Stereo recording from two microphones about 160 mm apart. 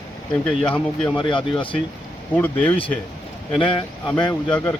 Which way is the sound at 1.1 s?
30° left (ahead or behind).